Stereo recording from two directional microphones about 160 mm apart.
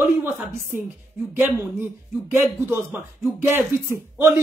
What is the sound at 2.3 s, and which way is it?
Speech, 15° right (ahead or behind).